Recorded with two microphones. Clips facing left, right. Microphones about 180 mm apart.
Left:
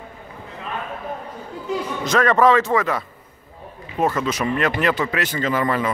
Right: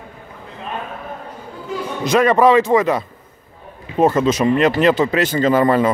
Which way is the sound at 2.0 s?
15° right (ahead or behind).